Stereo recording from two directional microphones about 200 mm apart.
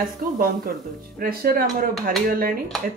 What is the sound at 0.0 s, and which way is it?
Speech, 45° right (ahead or behind).